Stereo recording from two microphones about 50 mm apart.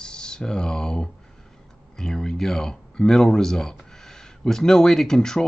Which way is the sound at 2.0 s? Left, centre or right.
Centre.